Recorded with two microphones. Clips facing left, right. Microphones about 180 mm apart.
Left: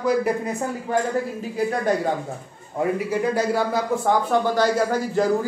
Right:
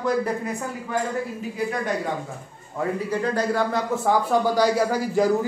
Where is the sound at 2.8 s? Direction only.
10° left (ahead or behind).